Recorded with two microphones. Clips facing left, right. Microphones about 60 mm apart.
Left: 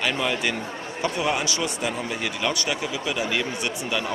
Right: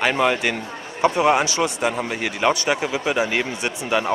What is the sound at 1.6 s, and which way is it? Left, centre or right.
A man's voice, right.